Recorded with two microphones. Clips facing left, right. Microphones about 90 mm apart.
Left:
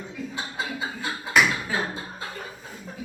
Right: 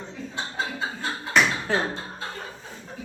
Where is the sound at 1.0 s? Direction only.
5° left (ahead or behind).